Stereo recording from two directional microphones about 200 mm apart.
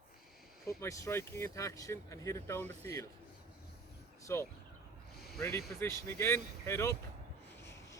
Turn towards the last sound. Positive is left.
turn(degrees=15)  # may be behind; listen again after turning